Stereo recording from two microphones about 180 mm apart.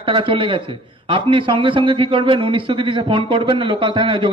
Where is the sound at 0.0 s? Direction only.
30° right (ahead or behind).